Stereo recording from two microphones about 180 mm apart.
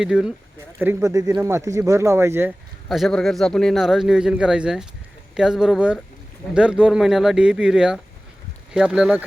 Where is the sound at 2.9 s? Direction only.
Centre (ahead or behind).